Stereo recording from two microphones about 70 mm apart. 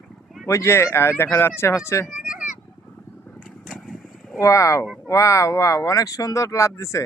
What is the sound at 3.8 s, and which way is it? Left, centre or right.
Vehicle, centre.